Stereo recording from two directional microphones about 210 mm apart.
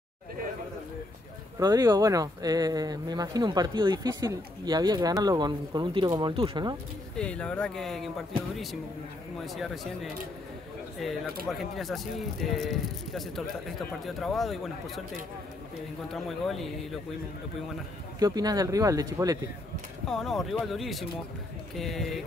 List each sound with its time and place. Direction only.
1.6 s speech: 15° right (ahead or behind)
7.2 s speech: 5° left (ahead or behind)
9.5 s speech: centre (ahead or behind)
11.4 s speech: centre (ahead or behind)
16.1 s speech: centre (ahead or behind)
18.2 s speech: 20° right (ahead or behind)
20.1 s speech: centre (ahead or behind)